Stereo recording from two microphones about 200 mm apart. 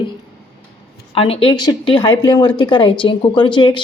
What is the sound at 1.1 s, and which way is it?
A woman's voice, 30° left (ahead or behind).